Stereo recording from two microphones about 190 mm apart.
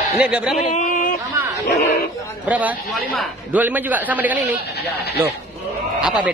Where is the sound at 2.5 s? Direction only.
10° right (ahead or behind).